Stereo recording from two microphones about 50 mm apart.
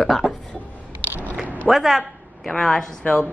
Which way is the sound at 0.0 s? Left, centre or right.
Centre.